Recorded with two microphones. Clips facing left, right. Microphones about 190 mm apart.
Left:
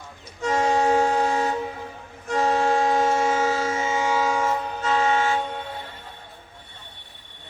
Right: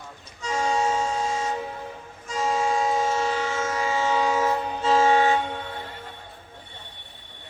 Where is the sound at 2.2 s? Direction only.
60° left (ahead or behind); by 4.3 s 10° left (ahead or behind).